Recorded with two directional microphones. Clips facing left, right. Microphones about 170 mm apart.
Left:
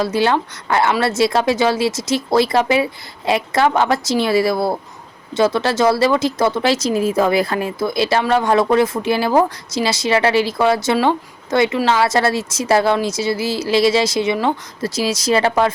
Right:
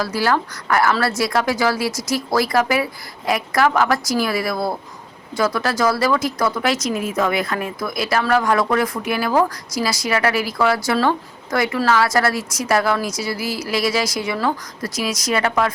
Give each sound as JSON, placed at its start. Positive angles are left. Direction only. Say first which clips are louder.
{"t": 0.0, "sound": "speech", "louder": "left 3 dB", "side_deg": 25}